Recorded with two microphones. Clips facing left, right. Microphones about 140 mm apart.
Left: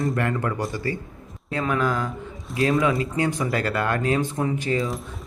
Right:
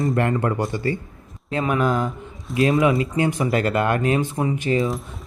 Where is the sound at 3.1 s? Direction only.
20° right (ahead or behind).